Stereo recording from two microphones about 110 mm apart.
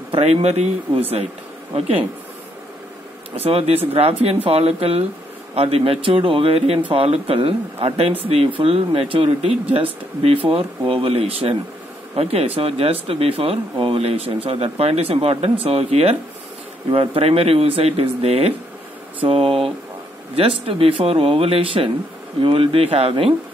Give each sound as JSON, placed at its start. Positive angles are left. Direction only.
{"t": 0.2, "sound": "speech", "side_deg": -75}
{"t": 1.7, "sound": "speech", "side_deg": -60}
{"t": 3.4, "sound": "speech", "side_deg": -65}
{"t": 16.9, "sound": "speech", "side_deg": -55}
{"t": 19.1, "sound": "speech", "side_deg": -55}